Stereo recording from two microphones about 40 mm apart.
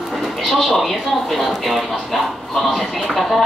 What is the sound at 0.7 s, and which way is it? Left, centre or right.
Speech, centre.